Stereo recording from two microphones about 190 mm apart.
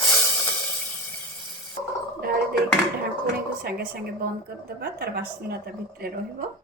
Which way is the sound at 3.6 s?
55° right (ahead or behind).